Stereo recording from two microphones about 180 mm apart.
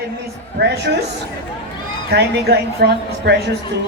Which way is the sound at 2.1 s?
65° right (ahead or behind).